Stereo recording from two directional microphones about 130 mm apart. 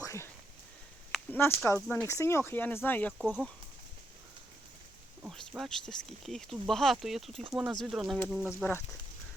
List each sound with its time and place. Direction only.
0.0 s a sound: 20° left (ahead or behind)
1.3 s speech: 15° left (ahead or behind)
5.3 s speech: 5° left (ahead or behind)
8.4 s speech: 20° left (ahead or behind)